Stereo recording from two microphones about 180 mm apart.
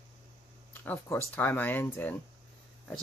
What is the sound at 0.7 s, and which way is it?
Speech, 15° left (ahead or behind).